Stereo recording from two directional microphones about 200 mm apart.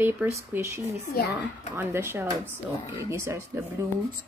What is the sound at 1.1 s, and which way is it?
Speech, 50° left (ahead or behind).